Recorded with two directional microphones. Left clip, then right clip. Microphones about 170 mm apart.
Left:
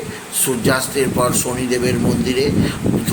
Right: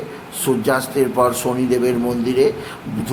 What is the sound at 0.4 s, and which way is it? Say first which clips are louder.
A man's voice: even; 15° right (ahead or behind).